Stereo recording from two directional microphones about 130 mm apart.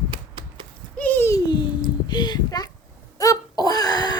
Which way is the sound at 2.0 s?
35° left (ahead or behind).